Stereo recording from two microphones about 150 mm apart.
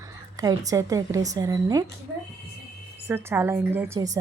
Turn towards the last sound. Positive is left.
turn(degrees=-25)  # may be behind; listen again after turning